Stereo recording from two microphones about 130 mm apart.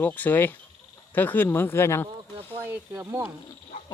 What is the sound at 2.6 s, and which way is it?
Speech, 20° right (ahead or behind).